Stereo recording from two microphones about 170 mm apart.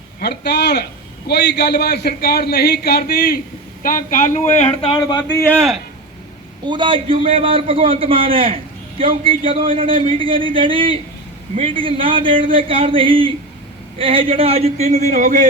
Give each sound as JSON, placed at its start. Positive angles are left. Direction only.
{"t": 0.2, "sound": "a man's voice", "side_deg": 75}
{"t": 3.8, "sound": "speech", "side_deg": 50}
{"t": 4.9, "sound": "speech", "side_deg": 25}
{"t": 6.7, "sound": "a man's voice", "side_deg": -30}